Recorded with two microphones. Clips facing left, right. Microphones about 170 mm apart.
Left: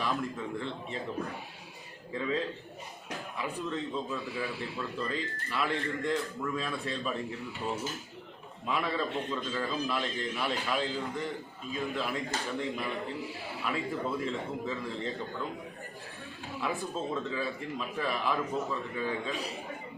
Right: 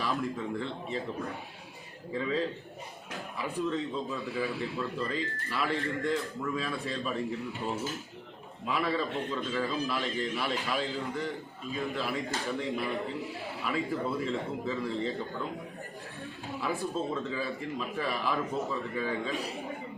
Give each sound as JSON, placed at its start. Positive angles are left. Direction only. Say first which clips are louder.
{"t": 0.0, "sound": "speech", "louder": "right 1 dB", "side_deg": 0}
{"t": 3.2, "sound": "a man's voice", "louder": "right 3 dB", "side_deg": 0}
{"t": 16.5, "sound": "a man's voice", "louder": "right 1 dB", "side_deg": 0}